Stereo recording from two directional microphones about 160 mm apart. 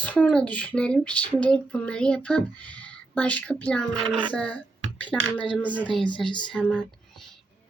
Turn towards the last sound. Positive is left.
turn(degrees=5)  # may be behind; listen again after turning